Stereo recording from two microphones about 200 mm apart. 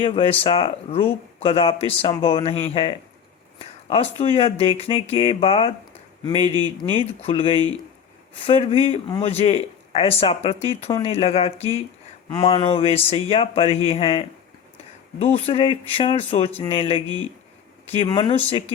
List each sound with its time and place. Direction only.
0.0 s speech: 30° left (ahead or behind)